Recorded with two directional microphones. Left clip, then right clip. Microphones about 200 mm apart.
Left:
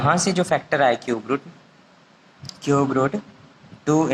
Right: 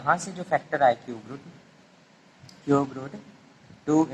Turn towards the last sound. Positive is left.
turn(degrees=30)  # may be behind; listen again after turning